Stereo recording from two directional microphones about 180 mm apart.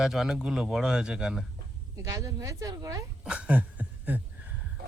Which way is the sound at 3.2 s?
5° right (ahead or behind).